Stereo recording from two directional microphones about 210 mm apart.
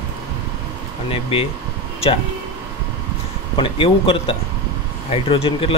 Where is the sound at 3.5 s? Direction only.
25° left (ahead or behind).